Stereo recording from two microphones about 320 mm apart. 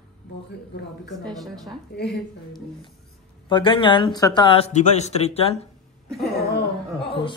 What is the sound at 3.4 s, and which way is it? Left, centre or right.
Speech, centre.